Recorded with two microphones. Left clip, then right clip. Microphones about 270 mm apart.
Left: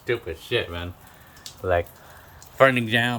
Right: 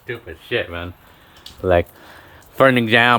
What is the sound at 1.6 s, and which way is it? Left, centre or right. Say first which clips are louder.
Speech: right 7 dB; right.